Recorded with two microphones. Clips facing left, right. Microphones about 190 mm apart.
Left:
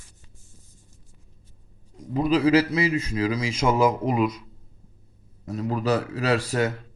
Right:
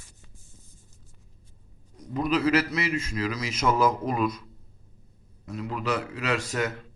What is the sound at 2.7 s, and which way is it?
A man's voice, 35° left (ahead or behind).